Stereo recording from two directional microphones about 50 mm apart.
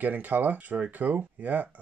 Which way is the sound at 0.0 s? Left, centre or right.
Right.